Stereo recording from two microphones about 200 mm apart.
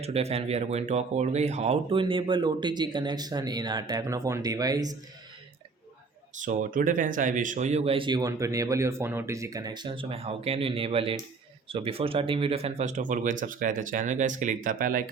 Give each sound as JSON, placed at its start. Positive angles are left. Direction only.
{"t": 0.0, "sound": "speech", "side_deg": -30}
{"t": 6.3, "sound": "speech", "side_deg": -40}